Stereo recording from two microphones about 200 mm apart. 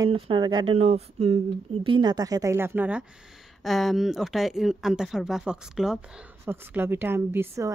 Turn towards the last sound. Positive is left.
turn(degrees=-15)  # may be behind; listen again after turning